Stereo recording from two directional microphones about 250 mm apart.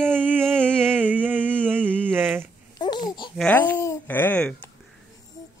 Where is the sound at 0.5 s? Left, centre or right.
Centre.